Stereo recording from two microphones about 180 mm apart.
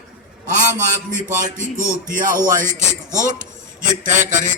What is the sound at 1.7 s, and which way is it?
A man's voice, 45° right (ahead or behind).